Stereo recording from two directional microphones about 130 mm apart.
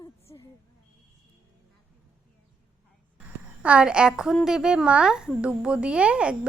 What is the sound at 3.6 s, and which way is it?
Speech, 10° right (ahead or behind).